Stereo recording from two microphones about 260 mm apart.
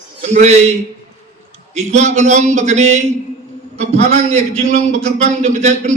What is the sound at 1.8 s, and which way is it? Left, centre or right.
A man's voice, right.